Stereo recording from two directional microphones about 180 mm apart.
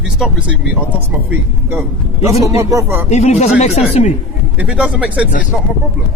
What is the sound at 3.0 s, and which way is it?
Speech, 40° left (ahead or behind).